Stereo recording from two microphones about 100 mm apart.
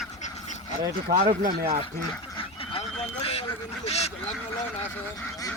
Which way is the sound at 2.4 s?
80° left.